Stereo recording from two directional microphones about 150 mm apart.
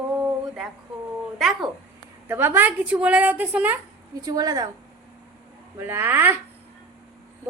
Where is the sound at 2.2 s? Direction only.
15° right (ahead or behind).